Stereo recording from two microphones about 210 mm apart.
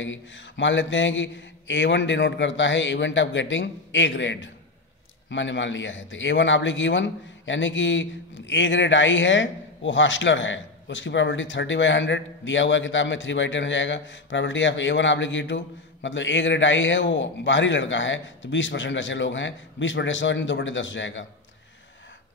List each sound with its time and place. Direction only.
0.0 s a man's voice: 60° left (ahead or behind)